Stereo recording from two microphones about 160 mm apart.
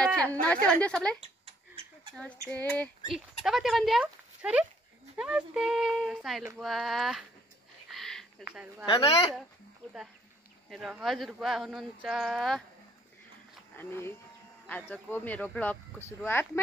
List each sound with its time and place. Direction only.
0.0 s a woman's voice: 5° left (ahead or behind)
2.4 s speech: 10° left (ahead or behind)
3.4 s speech: centre (ahead or behind)
7.9 s a sound: centre (ahead or behind)
8.8 s speech: 35° left (ahead or behind)
9.8 s speech: 5° left (ahead or behind)
13.7 s speech: 15° left (ahead or behind)